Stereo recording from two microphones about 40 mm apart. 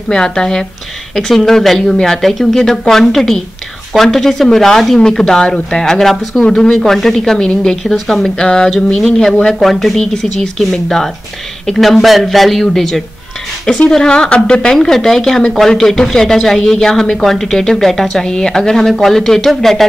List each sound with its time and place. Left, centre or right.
0.1 s speech: centre
6.8 s a man's voice: centre